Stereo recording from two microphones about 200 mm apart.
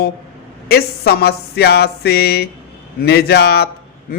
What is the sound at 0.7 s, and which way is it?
Speech, 50° left (ahead or behind).